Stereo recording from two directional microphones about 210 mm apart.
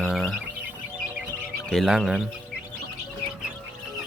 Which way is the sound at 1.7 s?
Centre (ahead or behind).